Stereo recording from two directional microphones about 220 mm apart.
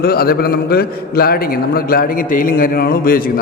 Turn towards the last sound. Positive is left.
turn(degrees=40)  # may be behind; listen again after turning